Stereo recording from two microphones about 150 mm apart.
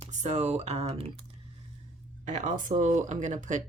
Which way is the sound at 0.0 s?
50° right (ahead or behind).